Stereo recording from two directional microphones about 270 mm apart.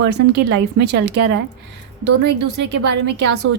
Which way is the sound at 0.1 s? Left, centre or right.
Right.